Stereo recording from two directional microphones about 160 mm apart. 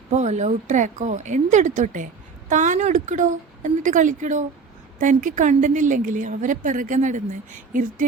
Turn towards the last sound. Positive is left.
turn(degrees=-55)  # may be behind; listen again after turning